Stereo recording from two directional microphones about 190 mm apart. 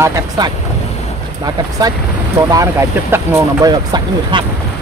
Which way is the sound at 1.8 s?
20° right (ahead or behind).